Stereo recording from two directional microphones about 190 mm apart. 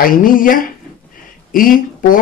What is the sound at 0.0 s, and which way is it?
Speech, 45° left (ahead or behind).